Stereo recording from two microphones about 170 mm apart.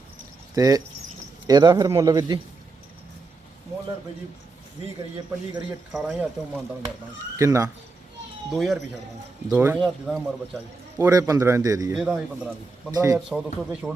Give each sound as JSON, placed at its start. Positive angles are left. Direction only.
{"t": 0.5, "sound": "a man's voice", "side_deg": -20}
{"t": 5.9, "sound": "a man's voice", "side_deg": 0}
{"t": 7.3, "sound": "speech", "side_deg": -20}
{"t": 8.4, "sound": "a man's voice", "side_deg": 0}
{"t": 9.5, "sound": "speech", "side_deg": -10}
{"t": 9.8, "sound": "a man's voice", "side_deg": 0}
{"t": 10.9, "sound": "a man's voice", "side_deg": -15}
{"t": 12.1, "sound": "speech", "side_deg": -10}
{"t": 12.9, "sound": "a man's voice", "side_deg": -20}
{"t": 13.1, "sound": "a man's voice", "side_deg": 0}